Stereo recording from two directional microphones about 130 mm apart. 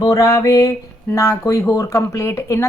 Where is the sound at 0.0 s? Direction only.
25° left (ahead or behind).